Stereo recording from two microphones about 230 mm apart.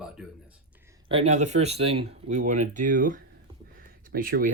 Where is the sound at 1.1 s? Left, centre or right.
Right.